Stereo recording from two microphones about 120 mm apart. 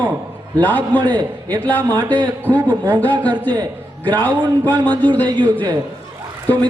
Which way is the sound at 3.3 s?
35° right (ahead or behind).